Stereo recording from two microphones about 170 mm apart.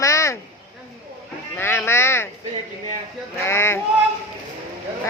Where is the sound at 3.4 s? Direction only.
15° left (ahead or behind).